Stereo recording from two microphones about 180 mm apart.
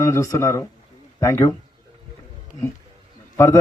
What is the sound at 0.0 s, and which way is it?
A man's voice, 15° left (ahead or behind).